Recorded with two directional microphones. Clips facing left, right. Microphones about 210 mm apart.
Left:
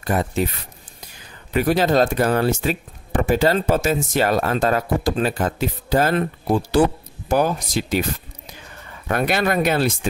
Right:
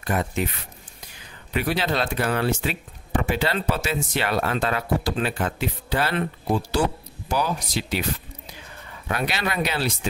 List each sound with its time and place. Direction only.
0.0 s speech: 35° left (ahead or behind)
9.0 s speech: 50° left (ahead or behind)